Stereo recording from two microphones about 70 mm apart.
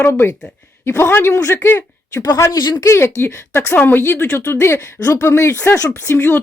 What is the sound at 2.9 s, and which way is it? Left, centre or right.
Speech, left.